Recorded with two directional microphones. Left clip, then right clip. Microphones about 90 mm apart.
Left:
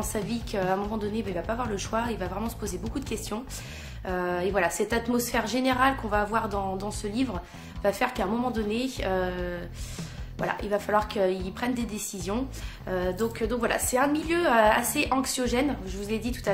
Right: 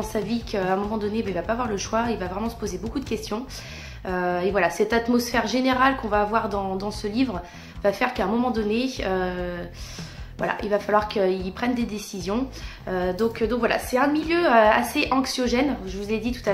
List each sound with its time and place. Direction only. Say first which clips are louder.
0.1 s a woman's voice: right 4 dB; 40° left (ahead or behind)
13.8 s a woman's voice: right 3 dB; 40° left (ahead or behind)